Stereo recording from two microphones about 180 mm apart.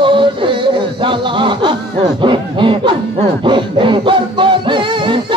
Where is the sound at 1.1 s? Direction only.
25° right (ahead or behind).